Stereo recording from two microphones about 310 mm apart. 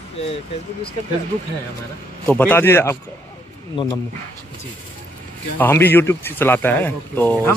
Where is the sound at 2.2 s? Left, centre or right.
Centre.